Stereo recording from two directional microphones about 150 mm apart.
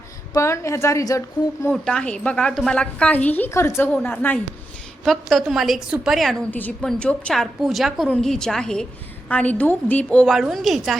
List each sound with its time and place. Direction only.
0.3 s a woman's voice: 20° left (ahead or behind)
1.7 s a woman's voice: 5° left (ahead or behind)
5.0 s a woman's voice: centre (ahead or behind)
6.5 s a woman's voice: 10° left (ahead or behind)